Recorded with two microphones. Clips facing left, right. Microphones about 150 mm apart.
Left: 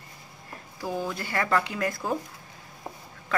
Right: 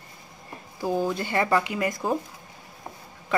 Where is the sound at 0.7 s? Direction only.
25° right (ahead or behind).